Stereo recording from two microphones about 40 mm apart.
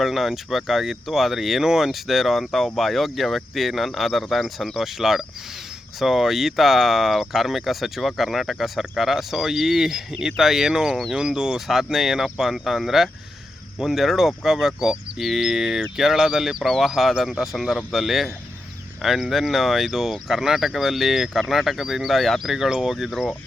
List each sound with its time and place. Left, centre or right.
0.0 s speech: centre
11.7 s speech: centre
16.6 s speech: centre
16.8 s speech: centre